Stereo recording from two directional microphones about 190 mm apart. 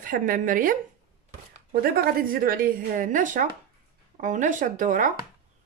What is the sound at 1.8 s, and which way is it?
Speech, 50° right (ahead or behind).